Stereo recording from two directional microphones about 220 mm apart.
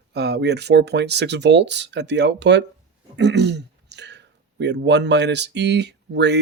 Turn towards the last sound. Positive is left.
turn(degrees=-50)  # may be behind; listen again after turning